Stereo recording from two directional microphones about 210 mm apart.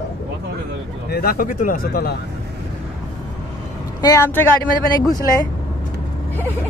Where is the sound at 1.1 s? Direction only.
45° left (ahead or behind).